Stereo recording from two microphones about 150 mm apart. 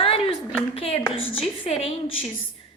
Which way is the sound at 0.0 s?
40° left (ahead or behind).